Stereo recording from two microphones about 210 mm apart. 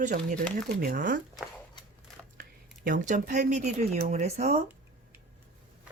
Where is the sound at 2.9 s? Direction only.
40° right (ahead or behind).